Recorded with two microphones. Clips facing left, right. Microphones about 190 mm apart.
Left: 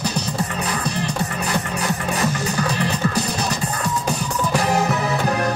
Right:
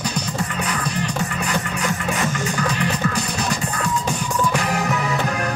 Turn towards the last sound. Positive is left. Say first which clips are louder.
# left 2 dB
turn(degrees=35)  # may be behind; listen again after turning